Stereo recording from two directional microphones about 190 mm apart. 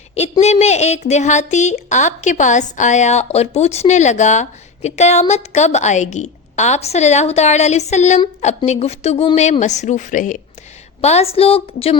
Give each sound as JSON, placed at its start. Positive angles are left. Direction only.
{"t": 0.1, "sound": "a woman's voice", "side_deg": 35}